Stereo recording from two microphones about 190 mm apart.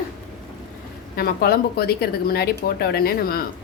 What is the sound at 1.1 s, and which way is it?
Speech, 55° left (ahead or behind).